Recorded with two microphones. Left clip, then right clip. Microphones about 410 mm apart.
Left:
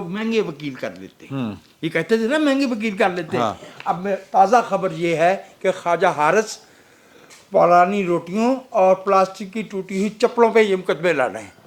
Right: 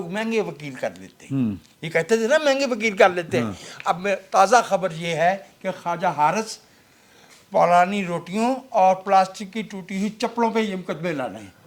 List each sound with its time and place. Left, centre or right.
0.1 s speech: right
1.3 s speech: left
1.8 s speech: right
5.6 s speech: right
7.5 s speech: right; by 11.4 s centre